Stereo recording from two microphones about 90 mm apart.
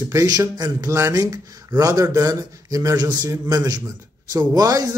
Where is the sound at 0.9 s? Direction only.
35° right (ahead or behind).